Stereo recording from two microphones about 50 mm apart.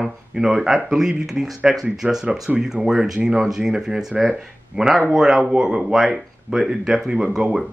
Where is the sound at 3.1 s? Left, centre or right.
Right.